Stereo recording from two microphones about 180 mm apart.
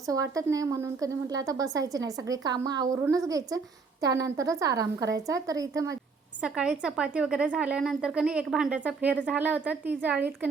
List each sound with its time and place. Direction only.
0.0 s a woman's voice: 20° right (ahead or behind)
6.4 s a woman's voice: 5° right (ahead or behind)